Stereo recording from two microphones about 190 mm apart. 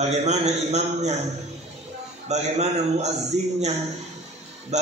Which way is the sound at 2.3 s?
35° right (ahead or behind).